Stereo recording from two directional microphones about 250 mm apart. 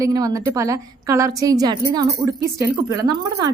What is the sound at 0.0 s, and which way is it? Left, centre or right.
A woman's voice, centre.